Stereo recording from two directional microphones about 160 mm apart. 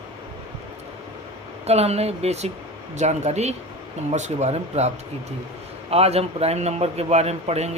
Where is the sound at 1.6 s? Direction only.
40° right (ahead or behind).